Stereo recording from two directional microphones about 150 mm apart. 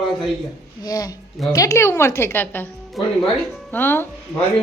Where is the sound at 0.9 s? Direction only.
25° left (ahead or behind).